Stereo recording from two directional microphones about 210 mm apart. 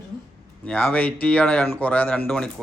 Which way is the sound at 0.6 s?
5° left (ahead or behind).